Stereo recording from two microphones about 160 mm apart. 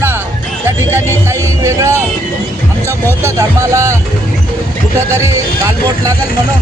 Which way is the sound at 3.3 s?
20° right (ahead or behind).